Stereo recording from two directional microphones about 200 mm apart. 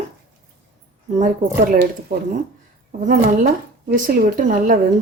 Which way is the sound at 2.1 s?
50° right (ahead or behind).